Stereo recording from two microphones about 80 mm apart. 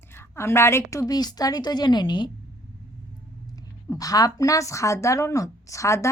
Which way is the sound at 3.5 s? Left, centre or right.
Left.